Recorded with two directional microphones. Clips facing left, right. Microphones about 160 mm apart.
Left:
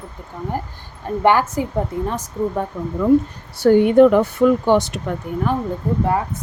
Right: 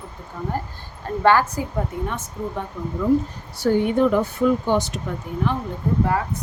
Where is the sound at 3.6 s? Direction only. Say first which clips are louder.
Left 7 dB; 70° left (ahead or behind).